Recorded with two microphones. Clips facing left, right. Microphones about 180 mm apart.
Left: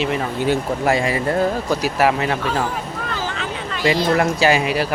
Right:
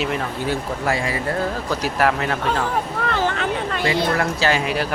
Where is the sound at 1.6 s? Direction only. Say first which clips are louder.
Left 2 dB; 5° left (ahead or behind).